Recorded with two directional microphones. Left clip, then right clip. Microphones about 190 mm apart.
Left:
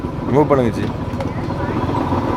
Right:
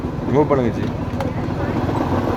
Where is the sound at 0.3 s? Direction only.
15° left (ahead or behind).